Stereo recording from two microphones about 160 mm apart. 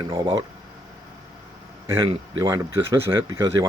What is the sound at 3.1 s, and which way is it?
Speech, 20° right (ahead or behind).